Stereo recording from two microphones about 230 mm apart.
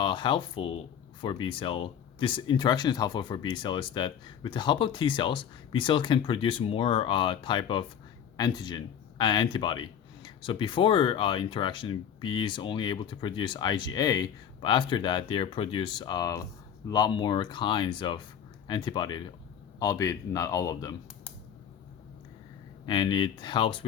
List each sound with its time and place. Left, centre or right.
0.0 s speech: left
22.9 s speech: centre